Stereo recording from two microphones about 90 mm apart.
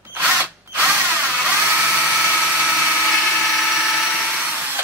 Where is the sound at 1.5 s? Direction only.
20° right (ahead or behind).